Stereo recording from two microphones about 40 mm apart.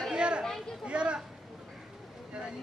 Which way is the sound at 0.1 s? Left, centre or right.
Right.